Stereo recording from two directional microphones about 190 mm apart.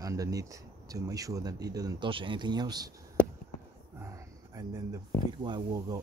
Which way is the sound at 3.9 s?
15° right (ahead or behind).